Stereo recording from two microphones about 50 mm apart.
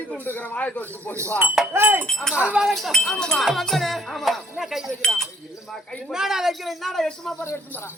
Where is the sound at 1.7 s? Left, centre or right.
Right.